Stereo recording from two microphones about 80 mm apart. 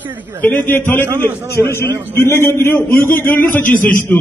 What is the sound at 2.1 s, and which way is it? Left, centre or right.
A man's voice, left.